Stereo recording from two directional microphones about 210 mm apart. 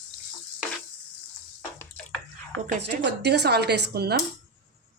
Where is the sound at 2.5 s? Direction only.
55° right (ahead or behind).